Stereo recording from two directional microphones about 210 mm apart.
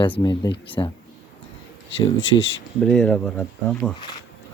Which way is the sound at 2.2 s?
25° left (ahead or behind).